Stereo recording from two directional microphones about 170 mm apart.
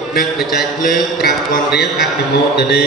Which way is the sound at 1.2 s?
70° left (ahead or behind).